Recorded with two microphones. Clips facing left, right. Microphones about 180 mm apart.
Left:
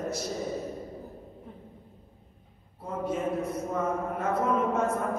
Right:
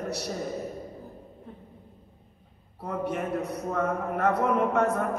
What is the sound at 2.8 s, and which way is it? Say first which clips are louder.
A man's voice: even; 70° right (ahead or behind).